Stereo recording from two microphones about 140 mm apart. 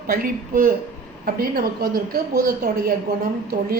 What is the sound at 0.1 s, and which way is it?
A woman's voice, 90° right.